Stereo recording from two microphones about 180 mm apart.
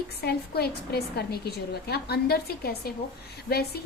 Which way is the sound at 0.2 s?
60° left (ahead or behind).